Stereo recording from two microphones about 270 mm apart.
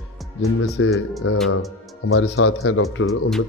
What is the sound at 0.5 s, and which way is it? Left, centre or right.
Speech, left.